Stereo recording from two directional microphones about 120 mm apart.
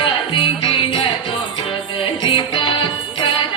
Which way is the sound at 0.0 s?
45° left (ahead or behind).